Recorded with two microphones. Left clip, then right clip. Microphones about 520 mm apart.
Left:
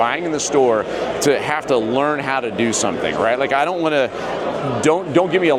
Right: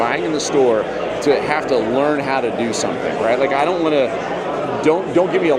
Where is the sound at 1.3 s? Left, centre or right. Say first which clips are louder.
Right 2 dB; left.